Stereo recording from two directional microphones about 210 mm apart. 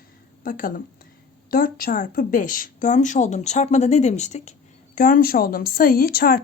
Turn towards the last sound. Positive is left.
turn(degrees=45)  # may be behind; listen again after turning